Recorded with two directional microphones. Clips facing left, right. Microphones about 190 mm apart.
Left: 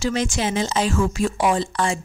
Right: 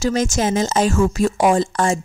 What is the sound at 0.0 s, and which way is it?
A woman's voice, 40° right (ahead or behind).